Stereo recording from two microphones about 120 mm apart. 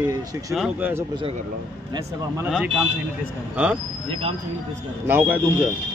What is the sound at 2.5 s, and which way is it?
A man's voice, 5° right (ahead or behind).